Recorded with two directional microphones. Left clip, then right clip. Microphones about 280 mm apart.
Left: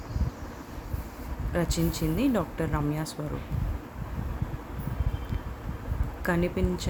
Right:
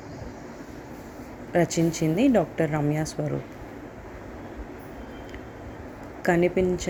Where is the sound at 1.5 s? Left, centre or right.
Centre.